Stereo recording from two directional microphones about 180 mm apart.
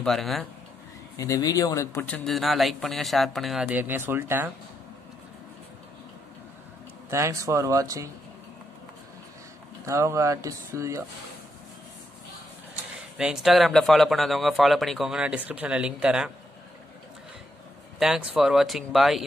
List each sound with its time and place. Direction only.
0.0 s a man's voice: centre (ahead or behind)
1.1 s a man's voice: 20° left (ahead or behind); by 4.5 s 10° right (ahead or behind)
7.1 s speech: 15° right (ahead or behind)
9.8 s speech: 15° right (ahead or behind)
13.2 s a man's voice: 5° right (ahead or behind)
17.9 s a man's voice: centre (ahead or behind)